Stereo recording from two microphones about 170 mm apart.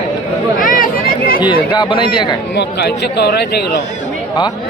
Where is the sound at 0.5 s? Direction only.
55° left (ahead or behind).